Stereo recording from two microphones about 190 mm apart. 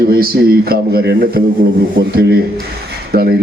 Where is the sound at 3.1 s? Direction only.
55° right (ahead or behind).